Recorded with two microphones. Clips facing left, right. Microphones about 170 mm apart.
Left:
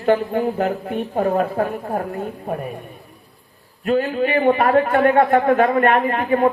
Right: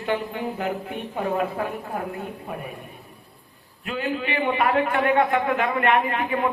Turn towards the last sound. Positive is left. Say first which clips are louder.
# left 6 dB
turn(degrees=45)  # may be behind; listen again after turning